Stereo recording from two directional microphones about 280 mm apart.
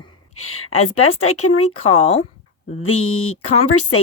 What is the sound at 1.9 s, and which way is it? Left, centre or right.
Speech, left.